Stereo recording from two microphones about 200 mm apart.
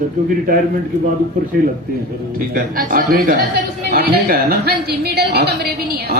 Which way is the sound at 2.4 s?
45° right (ahead or behind).